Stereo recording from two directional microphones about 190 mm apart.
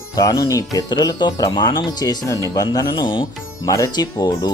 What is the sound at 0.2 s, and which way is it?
Speech, 20° left (ahead or behind).